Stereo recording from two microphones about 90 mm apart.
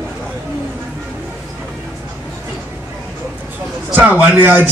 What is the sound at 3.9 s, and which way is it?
Speech, 20° right (ahead or behind).